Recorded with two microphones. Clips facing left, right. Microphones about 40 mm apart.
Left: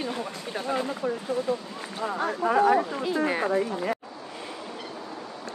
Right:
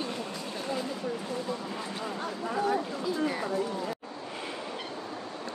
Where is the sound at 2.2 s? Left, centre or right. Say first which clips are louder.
Left 9 dB; left.